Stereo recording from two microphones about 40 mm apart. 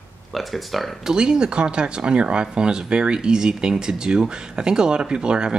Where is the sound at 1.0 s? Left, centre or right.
Right.